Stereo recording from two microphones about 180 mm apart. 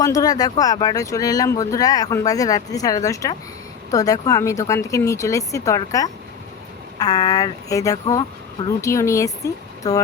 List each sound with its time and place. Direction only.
0.0 s speech: 20° left (ahead or behind)